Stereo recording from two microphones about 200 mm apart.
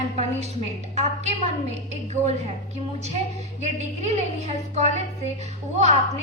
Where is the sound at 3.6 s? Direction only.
35° right (ahead or behind).